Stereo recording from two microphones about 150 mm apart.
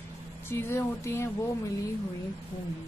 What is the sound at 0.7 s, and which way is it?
Speech, 15° left (ahead or behind).